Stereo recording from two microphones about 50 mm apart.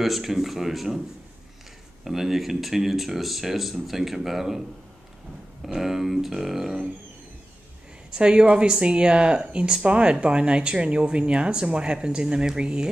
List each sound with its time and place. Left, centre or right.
0.0 s speech: centre
2.0 s speech: centre
5.7 s speech: centre
8.1 s speech: centre